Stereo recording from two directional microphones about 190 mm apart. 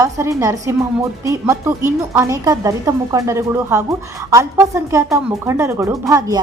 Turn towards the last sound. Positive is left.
turn(degrees=-20)  # may be behind; listen again after turning